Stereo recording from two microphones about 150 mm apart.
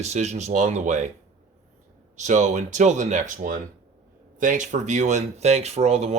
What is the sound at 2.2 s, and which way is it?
Speech, 50° right (ahead or behind).